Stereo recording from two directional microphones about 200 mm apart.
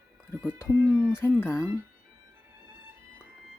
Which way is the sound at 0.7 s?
10° right (ahead or behind).